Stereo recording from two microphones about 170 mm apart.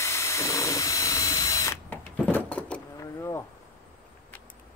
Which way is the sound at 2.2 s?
5° left (ahead or behind).